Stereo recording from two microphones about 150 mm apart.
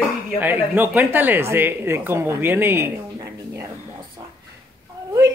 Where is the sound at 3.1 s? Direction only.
20° right (ahead or behind).